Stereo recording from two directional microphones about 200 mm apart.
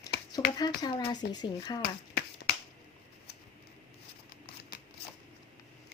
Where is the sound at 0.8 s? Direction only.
20° left (ahead or behind).